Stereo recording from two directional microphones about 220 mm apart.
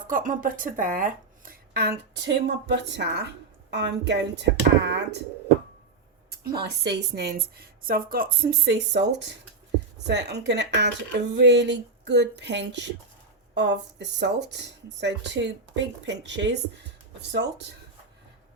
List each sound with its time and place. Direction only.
0.1 s speech: 35° right (ahead or behind)
1.7 s a woman's voice: 50° right (ahead or behind)
6.4 s a woman's voice: 45° right (ahead or behind)